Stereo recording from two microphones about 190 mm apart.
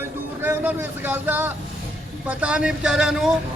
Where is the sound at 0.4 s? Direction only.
10° right (ahead or behind).